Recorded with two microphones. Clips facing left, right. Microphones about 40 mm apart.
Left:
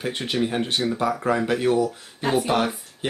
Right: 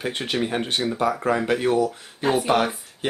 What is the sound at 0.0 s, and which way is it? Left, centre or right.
Speech, centre.